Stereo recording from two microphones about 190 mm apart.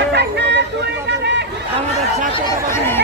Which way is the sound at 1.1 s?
65° right (ahead or behind).